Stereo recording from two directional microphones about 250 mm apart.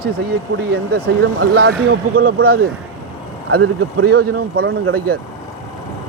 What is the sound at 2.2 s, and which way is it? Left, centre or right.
Speech, right.